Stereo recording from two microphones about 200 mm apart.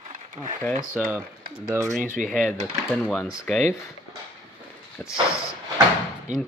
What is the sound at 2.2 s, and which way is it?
Speech, 5° right (ahead or behind).